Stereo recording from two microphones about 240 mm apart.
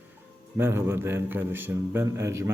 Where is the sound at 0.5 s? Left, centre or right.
Centre.